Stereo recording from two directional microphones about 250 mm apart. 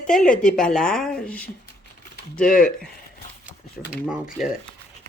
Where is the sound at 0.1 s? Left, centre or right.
Centre.